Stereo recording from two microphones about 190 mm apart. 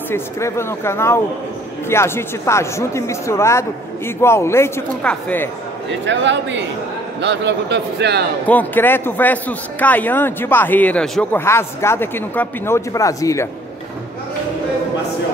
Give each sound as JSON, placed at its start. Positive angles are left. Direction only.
{"t": 0.1, "sound": "a man's voice", "side_deg": 15}
{"t": 5.9, "sound": "a man's voice", "side_deg": -70}
{"t": 8.5, "sound": "a man's voice", "side_deg": 10}